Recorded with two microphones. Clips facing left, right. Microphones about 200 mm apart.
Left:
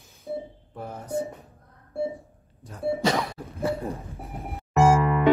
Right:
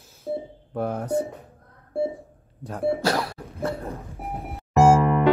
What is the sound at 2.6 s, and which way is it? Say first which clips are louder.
Speech: right 3 dB; 65° right (ahead or behind).